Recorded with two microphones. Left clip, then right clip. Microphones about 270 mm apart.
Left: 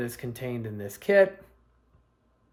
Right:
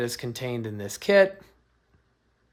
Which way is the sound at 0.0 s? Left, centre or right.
Right.